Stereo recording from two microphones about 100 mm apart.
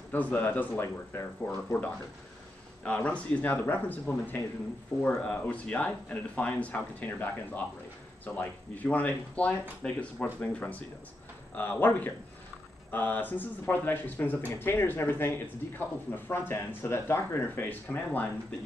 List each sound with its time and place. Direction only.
0.1 s speech: 20° left (ahead or behind)